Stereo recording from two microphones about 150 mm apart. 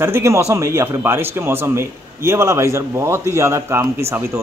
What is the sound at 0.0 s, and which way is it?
A man's voice, 20° right (ahead or behind).